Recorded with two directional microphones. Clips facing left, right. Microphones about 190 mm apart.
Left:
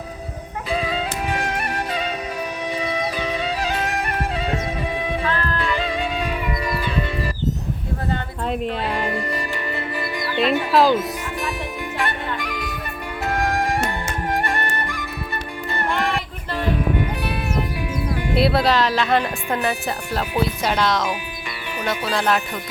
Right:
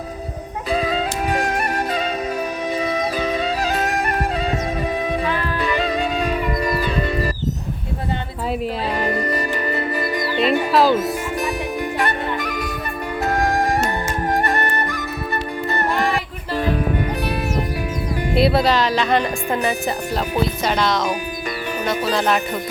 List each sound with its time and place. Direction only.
0.7 s music: 40° right (ahead or behind)
9.0 s music: 40° right (ahead or behind)
10.7 s speech: centre (ahead or behind)
11.9 s music: 40° right (ahead or behind)
18.3 s speech: centre (ahead or behind)
22.1 s speech: centre (ahead or behind)